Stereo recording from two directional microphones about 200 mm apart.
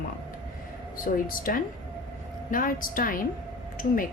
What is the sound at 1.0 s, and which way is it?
Speech, 45° left (ahead or behind).